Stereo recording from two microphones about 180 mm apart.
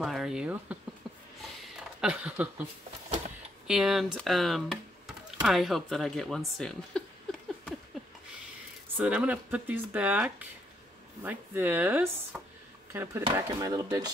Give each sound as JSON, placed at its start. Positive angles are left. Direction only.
{"t": 0.0, "sound": "speech", "side_deg": 0}
{"t": 1.6, "sound": "a sound", "side_deg": -5}
{"t": 3.6, "sound": "speech", "side_deg": -5}
{"t": 8.9, "sound": "speech", "side_deg": -5}
{"t": 13.2, "sound": "speech", "side_deg": -25}